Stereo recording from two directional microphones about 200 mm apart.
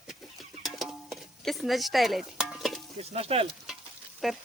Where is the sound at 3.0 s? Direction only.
30° right (ahead or behind).